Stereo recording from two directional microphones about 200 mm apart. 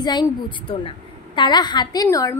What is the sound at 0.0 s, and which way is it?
A woman's voice, 20° left (ahead or behind).